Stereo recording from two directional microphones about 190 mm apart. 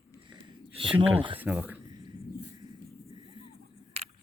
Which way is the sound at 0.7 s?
30° right (ahead or behind).